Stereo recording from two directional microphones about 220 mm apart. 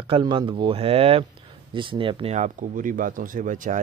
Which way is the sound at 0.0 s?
25° right (ahead or behind).